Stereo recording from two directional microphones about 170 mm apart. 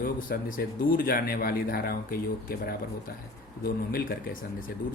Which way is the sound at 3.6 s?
60° left (ahead or behind).